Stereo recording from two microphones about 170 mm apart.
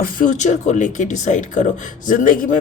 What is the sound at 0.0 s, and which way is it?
Speech, 50° left (ahead or behind).